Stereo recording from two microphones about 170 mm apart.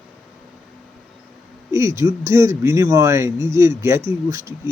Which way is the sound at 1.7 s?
15° right (ahead or behind).